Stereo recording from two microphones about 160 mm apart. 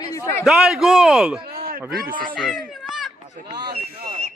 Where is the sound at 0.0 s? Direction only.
20° left (ahead or behind).